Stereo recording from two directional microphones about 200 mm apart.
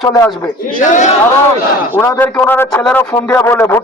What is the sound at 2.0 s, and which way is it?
Speech, 10° left (ahead or behind).